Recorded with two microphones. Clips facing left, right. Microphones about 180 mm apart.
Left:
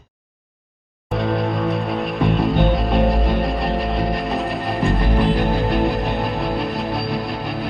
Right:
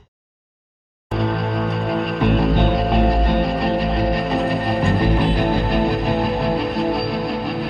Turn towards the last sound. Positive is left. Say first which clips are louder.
# right 3 dB
turn(degrees=0)  # may be behind; listen again after turning